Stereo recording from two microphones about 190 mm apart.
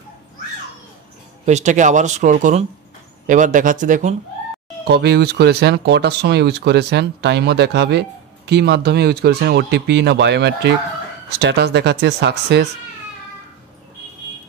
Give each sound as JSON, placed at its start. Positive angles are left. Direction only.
{"t": 1.4, "sound": "speech", "side_deg": -40}
{"t": 4.8, "sound": "speech", "side_deg": -60}